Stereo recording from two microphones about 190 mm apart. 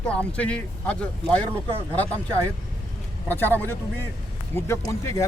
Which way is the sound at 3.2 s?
10° left (ahead or behind).